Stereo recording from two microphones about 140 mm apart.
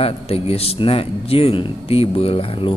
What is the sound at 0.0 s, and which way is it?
A man's voice, 45° left (ahead or behind).